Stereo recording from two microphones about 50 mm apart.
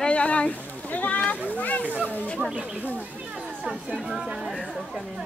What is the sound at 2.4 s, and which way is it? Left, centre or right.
Speech, right.